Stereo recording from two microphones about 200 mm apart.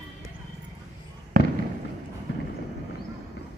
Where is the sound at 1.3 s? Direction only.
45° right (ahead or behind).